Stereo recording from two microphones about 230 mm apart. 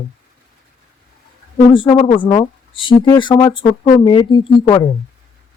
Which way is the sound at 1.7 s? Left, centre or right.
Left.